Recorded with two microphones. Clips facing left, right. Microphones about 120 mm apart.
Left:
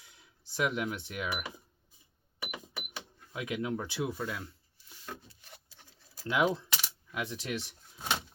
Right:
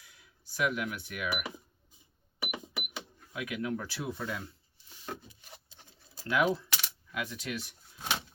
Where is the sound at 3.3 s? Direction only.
25° left (ahead or behind).